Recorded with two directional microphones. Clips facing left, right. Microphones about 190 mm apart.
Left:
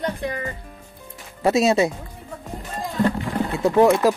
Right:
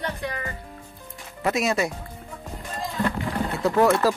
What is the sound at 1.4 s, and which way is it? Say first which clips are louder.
Speech: left 6 dB; 25° left (ahead or behind).